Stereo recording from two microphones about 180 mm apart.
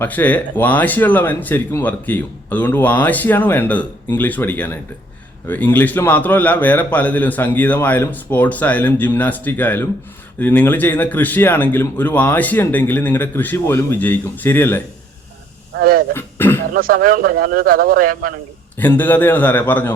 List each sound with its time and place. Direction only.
0.0 s speech: 10° left (ahead or behind)
15.7 s speech: 55° right (ahead or behind)
16.1 s throat clearing: 10° left (ahead or behind)
16.7 s speech: 55° right (ahead or behind)
18.8 s speech: 10° left (ahead or behind)